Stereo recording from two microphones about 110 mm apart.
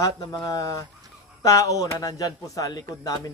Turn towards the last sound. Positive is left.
turn(degrees=35)  # may be behind; listen again after turning